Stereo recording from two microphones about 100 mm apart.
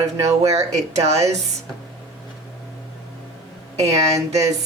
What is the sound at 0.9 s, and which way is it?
Speech, 90° right.